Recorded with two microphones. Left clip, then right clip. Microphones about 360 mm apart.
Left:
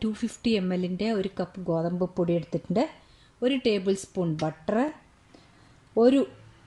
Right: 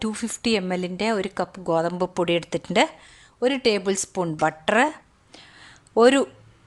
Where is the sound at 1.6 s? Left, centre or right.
Right.